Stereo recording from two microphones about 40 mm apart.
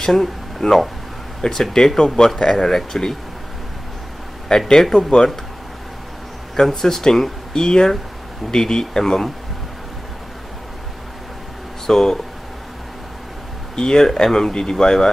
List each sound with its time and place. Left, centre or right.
0.0 s speech: centre
4.5 s speech: centre
6.5 s speech: centre
11.8 s speech: centre
13.7 s speech: centre